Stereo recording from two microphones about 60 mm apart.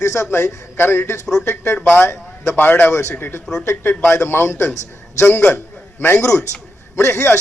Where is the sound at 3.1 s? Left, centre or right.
Left.